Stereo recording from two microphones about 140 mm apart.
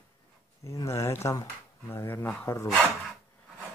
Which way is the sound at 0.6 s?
20° left (ahead or behind).